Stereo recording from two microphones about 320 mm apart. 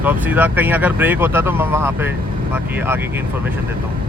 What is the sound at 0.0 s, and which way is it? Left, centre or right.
Speech, centre.